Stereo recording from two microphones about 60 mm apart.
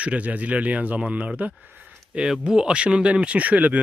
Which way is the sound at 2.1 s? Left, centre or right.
Centre.